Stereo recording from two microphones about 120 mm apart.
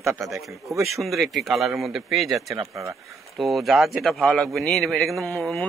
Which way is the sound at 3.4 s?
Centre (ahead or behind).